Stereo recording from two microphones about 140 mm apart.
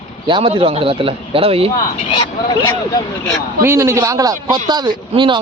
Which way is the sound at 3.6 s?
20° right (ahead or behind).